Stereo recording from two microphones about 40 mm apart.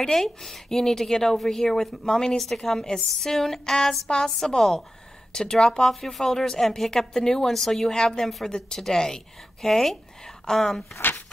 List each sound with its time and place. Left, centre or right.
0.0 s speech: centre
2.3 s a woman's voice: centre